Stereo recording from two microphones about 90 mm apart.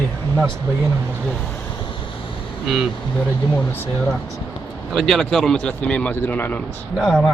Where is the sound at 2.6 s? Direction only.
5° right (ahead or behind).